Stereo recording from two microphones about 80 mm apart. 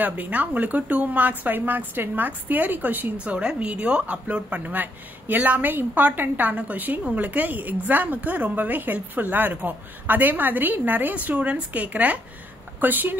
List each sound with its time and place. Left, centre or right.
0.0 s speech: centre